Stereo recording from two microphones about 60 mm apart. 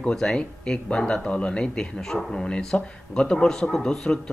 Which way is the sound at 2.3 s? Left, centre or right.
Centre.